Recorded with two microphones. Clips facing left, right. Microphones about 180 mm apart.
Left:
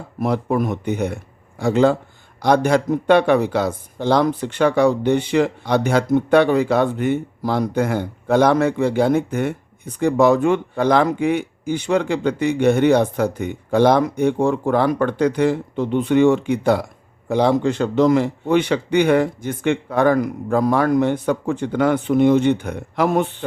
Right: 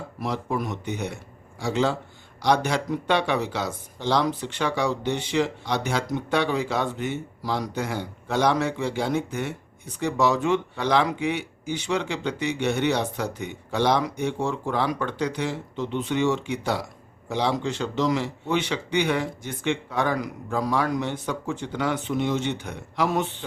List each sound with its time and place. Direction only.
0.2 s speech: 55° left (ahead or behind)